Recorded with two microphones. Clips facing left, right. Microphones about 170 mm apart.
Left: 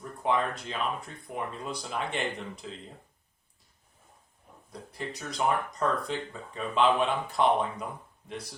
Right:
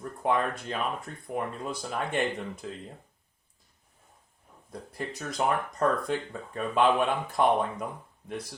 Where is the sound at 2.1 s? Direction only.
50° right (ahead or behind).